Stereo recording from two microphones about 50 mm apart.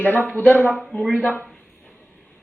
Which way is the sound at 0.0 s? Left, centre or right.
Left.